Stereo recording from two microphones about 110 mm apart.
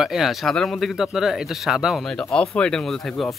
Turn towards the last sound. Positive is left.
turn(degrees=0)  # may be behind; listen again after turning